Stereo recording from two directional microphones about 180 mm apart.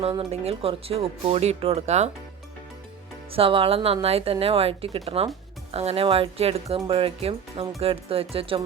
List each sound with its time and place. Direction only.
0.3 s speech: 35° right (ahead or behind)
3.3 s speech: 30° right (ahead or behind)